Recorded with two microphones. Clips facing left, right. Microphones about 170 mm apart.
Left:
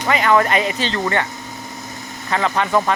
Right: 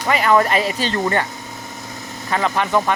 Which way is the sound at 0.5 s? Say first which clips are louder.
Even; 40° right (ahead or behind).